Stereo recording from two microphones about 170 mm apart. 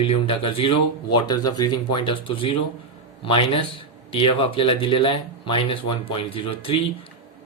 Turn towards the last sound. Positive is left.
turn(degrees=30)  # may be behind; listen again after turning